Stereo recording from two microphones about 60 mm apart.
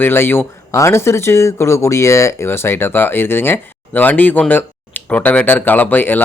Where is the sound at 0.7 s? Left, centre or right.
Left.